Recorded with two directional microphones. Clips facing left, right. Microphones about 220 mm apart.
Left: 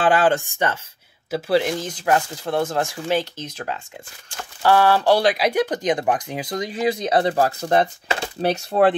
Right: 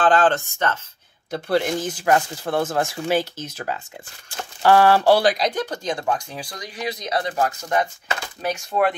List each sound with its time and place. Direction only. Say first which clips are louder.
0.0 s speech: even; 10° left (ahead or behind)
1.3 s speech: left 2 dB; centre (ahead or behind)
5.3 s speech: left 4 dB; 10° left (ahead or behind); by 8.9 s 35° left (ahead or behind)